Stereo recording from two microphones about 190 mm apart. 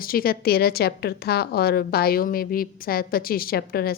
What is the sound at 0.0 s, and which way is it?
A woman's voice, 50° left (ahead or behind).